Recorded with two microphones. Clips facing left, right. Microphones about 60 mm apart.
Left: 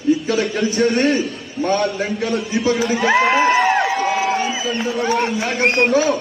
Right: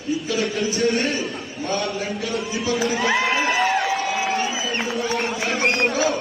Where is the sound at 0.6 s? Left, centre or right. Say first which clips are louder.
Left 3 dB; left.